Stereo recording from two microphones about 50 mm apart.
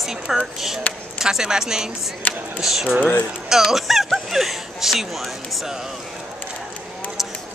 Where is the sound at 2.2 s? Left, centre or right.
Left.